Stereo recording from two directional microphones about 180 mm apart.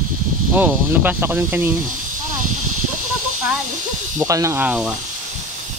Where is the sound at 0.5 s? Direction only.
10° right (ahead or behind).